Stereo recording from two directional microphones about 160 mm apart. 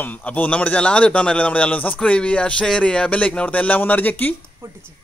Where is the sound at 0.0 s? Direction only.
10° left (ahead or behind).